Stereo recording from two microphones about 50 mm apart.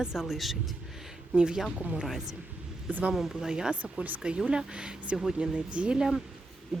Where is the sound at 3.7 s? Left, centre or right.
Right.